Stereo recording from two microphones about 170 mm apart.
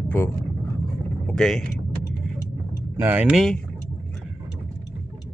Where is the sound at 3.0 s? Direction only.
10° right (ahead or behind).